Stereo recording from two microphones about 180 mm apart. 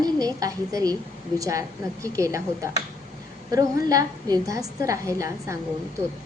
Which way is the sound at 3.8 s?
20° right (ahead or behind).